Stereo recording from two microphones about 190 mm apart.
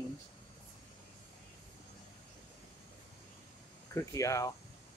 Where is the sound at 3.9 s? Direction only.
15° left (ahead or behind).